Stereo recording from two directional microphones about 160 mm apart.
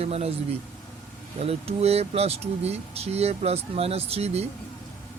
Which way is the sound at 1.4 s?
40° right (ahead or behind).